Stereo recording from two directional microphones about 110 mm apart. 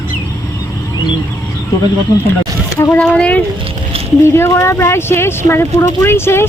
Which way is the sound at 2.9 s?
10° left (ahead or behind).